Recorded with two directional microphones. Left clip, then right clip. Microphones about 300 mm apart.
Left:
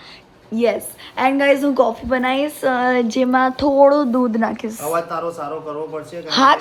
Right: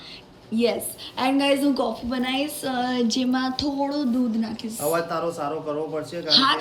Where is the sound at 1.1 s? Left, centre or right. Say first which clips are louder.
Left 6 dB; centre.